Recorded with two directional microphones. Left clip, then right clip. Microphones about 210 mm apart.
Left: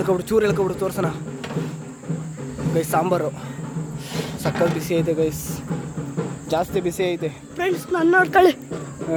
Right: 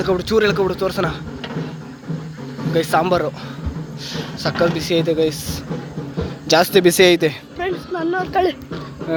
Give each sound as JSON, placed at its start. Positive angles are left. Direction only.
{"t": 0.0, "sound": "speech", "side_deg": 10}
{"t": 2.7, "sound": "speech", "side_deg": 0}
{"t": 4.4, "sound": "speech", "side_deg": 5}
{"t": 6.5, "sound": "speech", "side_deg": -20}
{"t": 7.6, "sound": "speech", "side_deg": 55}